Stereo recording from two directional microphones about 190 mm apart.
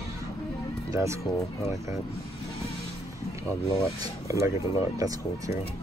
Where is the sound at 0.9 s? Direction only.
15° right (ahead or behind).